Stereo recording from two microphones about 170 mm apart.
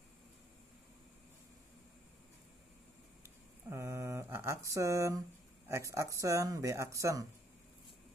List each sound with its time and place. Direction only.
3.7 s mantra: 15° right (ahead or behind)
5.7 s speech: 15° right (ahead or behind)